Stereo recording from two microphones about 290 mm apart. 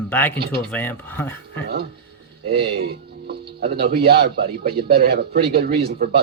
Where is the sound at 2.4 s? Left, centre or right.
Right.